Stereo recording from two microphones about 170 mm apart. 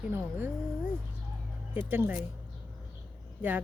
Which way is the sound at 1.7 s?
10° right (ahead or behind).